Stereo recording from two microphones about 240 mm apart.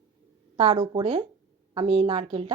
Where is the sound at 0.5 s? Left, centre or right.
Right.